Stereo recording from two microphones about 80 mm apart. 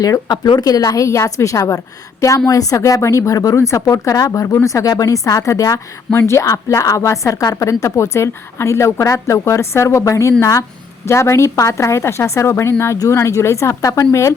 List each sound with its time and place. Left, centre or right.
0.3 s speech: left
0.6 s a woman's voice: left